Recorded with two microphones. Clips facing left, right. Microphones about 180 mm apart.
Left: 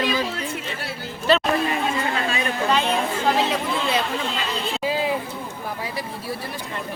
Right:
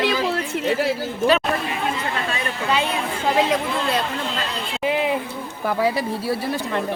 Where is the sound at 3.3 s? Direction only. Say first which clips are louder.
Right 3 dB; 5° right (ahead or behind).